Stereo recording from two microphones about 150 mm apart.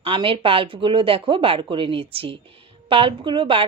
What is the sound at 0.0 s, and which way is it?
Speech, 35° right (ahead or behind).